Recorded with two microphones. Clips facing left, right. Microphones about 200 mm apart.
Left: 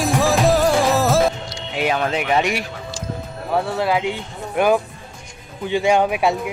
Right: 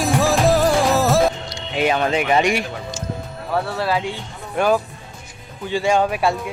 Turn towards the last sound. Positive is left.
turn(degrees=15)  # may be behind; listen again after turning